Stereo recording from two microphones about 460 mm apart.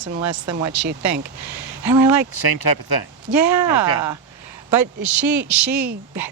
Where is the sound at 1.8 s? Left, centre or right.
Centre.